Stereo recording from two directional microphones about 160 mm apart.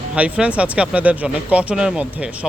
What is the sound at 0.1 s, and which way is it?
Speech, 5° right (ahead or behind).